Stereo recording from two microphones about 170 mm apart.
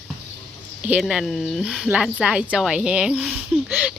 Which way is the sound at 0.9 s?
5° right (ahead or behind).